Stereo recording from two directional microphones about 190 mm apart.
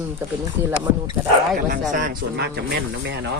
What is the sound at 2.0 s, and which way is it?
Speech, 60° right (ahead or behind).